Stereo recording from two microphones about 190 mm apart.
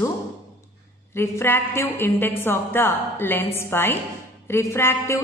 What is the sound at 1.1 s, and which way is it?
A woman's voice, 10° left (ahead or behind).